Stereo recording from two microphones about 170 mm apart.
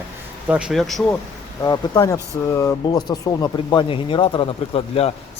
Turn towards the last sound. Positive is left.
turn(degrees=35)  # may be behind; listen again after turning